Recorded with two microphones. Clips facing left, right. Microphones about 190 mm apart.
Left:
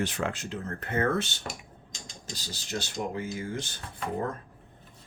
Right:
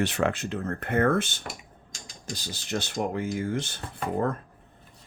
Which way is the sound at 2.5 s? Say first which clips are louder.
Right 4 dB; 55° right (ahead or behind).